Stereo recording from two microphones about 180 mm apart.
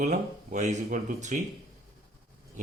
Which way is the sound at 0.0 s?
40° right (ahead or behind).